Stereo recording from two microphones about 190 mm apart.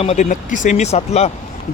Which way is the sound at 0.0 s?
35° left (ahead or behind).